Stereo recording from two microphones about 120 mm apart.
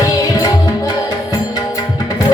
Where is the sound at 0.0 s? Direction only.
30° left (ahead or behind).